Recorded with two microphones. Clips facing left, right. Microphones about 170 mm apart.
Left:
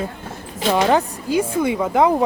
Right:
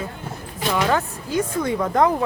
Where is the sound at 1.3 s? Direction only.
10° left (ahead or behind).